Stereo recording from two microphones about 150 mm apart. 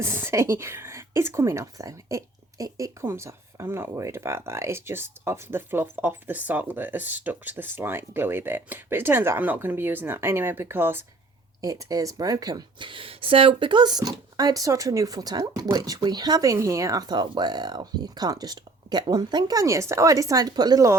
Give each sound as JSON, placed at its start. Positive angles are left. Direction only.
{"t": 0.0, "sound": "a woman's voice", "side_deg": -15}